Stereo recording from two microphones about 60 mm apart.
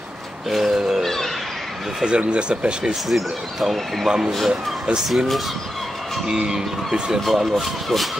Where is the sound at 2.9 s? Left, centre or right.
Centre.